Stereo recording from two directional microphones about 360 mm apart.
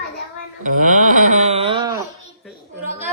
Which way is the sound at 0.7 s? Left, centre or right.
Right.